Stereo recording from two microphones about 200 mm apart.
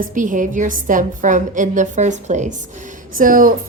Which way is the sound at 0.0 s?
40° right (ahead or behind).